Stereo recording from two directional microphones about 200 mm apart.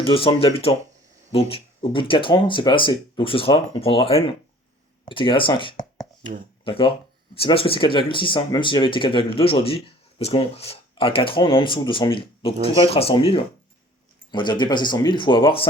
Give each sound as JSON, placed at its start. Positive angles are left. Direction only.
{"t": 0.0, "sound": "speech", "side_deg": 25}